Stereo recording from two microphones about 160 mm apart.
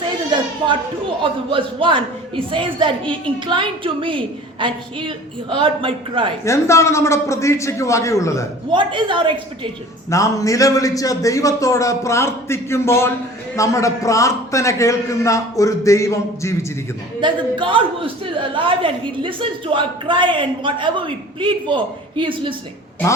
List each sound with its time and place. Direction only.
1.2 s a man's voice: 30° right (ahead or behind)
6.4 s a man's voice: 20° left (ahead or behind)
8.7 s a man's voice: 30° right (ahead or behind)
10.1 s a man's voice: 20° left (ahead or behind)
17.2 s a man's voice: 30° right (ahead or behind)